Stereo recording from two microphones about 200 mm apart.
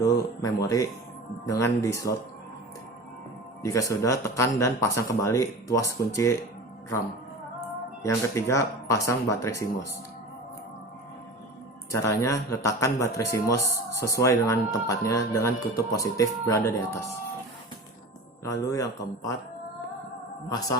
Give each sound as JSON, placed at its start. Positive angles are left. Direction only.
{"t": 0.4, "sound": "a man's voice", "side_deg": 15}
{"t": 3.6, "sound": "a man's voice", "side_deg": 15}
{"t": 8.0, "sound": "a man's voice", "side_deg": 15}
{"t": 11.9, "sound": "a man's voice", "side_deg": 15}
{"t": 18.4, "sound": "a man's voice", "side_deg": 15}
{"t": 20.5, "sound": "a man's voice", "side_deg": 15}